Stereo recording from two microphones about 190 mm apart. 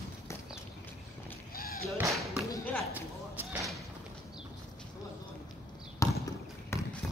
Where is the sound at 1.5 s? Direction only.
50° left (ahead or behind).